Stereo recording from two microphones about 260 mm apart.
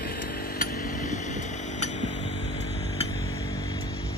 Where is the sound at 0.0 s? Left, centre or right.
Left.